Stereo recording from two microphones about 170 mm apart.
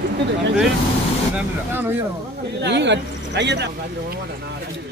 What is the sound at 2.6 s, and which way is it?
A man's voice, 90° right.